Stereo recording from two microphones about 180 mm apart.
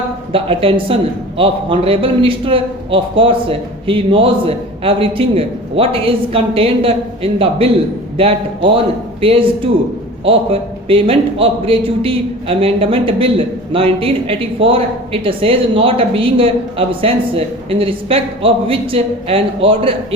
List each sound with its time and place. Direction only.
0.3 s a woman's voice: 30° right (ahead or behind)